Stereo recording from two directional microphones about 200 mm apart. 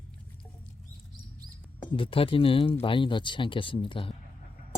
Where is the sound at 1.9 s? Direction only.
25° left (ahead or behind).